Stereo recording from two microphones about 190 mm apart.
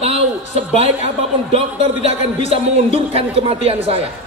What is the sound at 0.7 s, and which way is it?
A man's voice, 30° right (ahead or behind).